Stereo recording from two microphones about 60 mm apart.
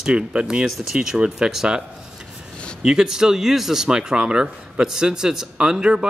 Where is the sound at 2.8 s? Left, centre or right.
Centre.